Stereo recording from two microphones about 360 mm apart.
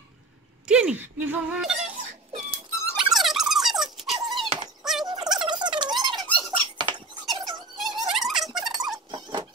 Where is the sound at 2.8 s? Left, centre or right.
Centre.